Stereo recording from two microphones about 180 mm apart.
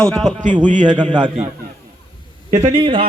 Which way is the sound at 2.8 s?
30° right (ahead or behind).